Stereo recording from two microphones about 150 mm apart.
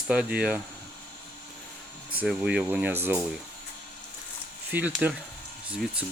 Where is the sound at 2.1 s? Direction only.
5° right (ahead or behind).